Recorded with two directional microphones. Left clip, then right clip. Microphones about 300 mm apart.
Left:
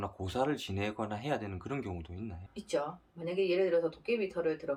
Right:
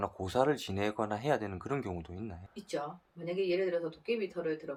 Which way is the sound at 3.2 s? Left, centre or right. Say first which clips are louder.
Left 2 dB; centre.